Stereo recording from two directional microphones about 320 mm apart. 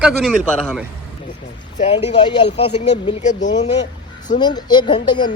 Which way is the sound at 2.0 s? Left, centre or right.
Centre.